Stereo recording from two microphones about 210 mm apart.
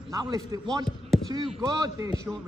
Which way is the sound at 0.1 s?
15° right (ahead or behind).